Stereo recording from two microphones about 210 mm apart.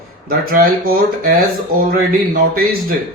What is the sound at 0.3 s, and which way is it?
Speech, 45° right (ahead or behind).